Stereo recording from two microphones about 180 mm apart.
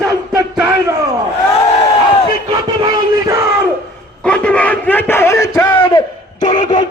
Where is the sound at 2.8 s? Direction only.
20° right (ahead or behind).